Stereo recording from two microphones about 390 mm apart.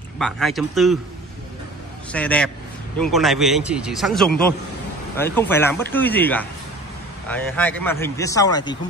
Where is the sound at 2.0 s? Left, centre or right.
Centre.